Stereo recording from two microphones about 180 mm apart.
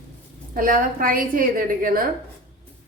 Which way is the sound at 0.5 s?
50° right (ahead or behind).